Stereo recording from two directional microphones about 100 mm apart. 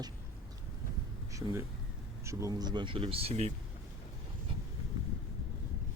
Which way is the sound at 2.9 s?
70° right (ahead or behind).